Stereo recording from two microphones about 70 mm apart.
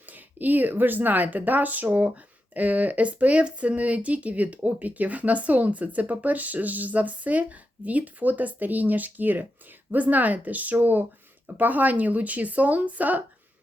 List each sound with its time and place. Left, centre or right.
0.0 s speech: right